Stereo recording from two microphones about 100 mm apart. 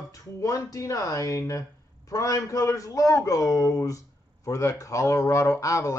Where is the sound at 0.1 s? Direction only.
35° left (ahead or behind).